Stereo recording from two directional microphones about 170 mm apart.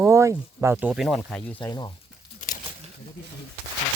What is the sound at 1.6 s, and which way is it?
Speech, 25° left (ahead or behind).